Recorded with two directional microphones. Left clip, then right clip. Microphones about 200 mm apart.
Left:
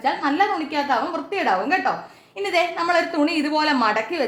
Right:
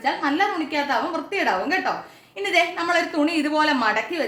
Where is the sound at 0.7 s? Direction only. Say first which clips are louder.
Left 1 dB; 25° left (ahead or behind).